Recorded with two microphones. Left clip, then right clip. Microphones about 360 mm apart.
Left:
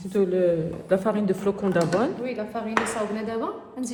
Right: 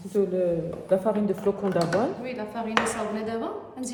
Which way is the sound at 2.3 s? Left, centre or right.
Centre.